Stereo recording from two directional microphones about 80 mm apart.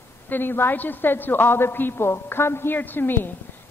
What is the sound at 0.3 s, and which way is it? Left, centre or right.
A woman's voice, left.